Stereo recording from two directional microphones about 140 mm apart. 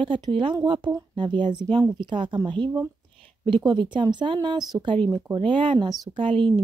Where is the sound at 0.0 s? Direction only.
35° right (ahead or behind).